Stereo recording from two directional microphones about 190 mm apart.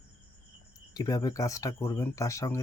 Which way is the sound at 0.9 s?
20° left (ahead or behind).